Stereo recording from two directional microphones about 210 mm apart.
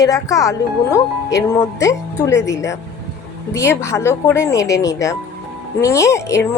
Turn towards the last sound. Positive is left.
turn(degrees=15)  # may be behind; listen again after turning